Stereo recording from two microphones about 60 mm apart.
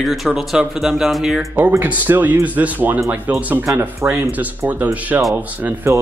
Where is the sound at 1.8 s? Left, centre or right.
Right.